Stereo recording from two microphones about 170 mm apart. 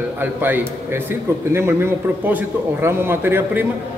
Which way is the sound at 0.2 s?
10° right (ahead or behind).